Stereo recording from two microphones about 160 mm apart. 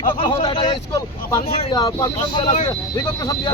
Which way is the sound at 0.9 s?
20° left (ahead or behind).